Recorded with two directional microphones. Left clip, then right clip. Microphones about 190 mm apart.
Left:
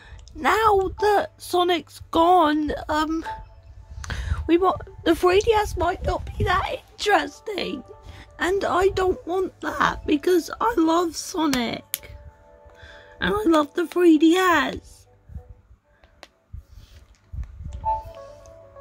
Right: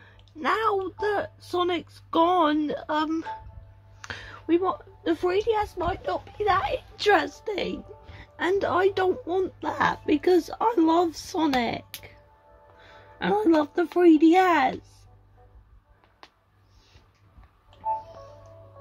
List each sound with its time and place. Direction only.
0.0 s speech: 25° left (ahead or behind)
4.0 s a sound: 15° left (ahead or behind)
4.4 s speech: 35° left (ahead or behind)
6.0 s a woman's voice: 35° left (ahead or behind)
6.7 s speech: 10° left (ahead or behind)
7.5 s speech: 25° left (ahead or behind)
12.7 s music: 20° left (ahead or behind)
13.9 s speech: 20° left (ahead or behind)
16.2 s a sound: 65° left (ahead or behind)